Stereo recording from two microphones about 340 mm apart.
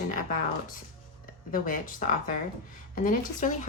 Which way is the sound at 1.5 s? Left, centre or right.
Left.